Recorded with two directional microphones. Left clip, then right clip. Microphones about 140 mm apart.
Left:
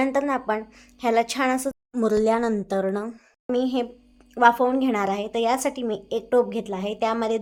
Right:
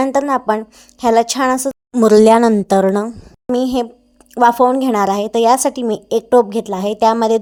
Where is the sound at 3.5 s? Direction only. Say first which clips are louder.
Right 7 dB; 45° right (ahead or behind).